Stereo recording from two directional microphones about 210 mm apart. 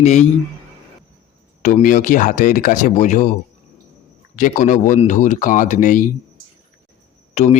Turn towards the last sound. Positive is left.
turn(degrees=30)  # may be behind; listen again after turning